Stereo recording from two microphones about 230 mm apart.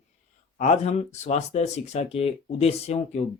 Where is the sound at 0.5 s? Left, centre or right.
Left.